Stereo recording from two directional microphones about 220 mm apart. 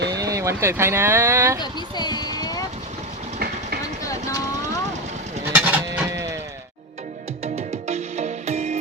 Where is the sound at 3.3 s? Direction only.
45° right (ahead or behind).